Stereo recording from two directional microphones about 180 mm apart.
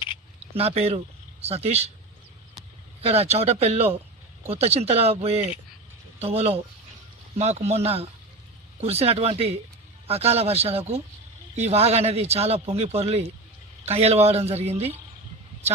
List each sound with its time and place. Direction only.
0.5 s speech: 35° right (ahead or behind)
3.1 s speech: 35° right (ahead or behind)
6.1 s speech: 35° right (ahead or behind)